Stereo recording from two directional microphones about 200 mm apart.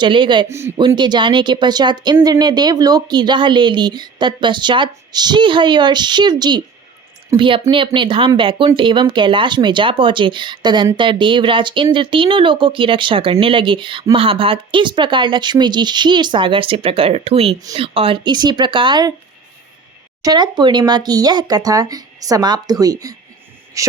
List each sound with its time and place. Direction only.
0.0 s speech: 25° right (ahead or behind)
20.2 s speech: 20° right (ahead or behind)